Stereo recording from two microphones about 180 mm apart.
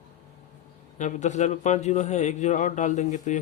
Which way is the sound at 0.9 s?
40° left (ahead or behind).